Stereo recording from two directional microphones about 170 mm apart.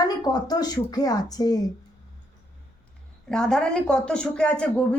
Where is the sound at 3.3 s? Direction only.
5° left (ahead or behind).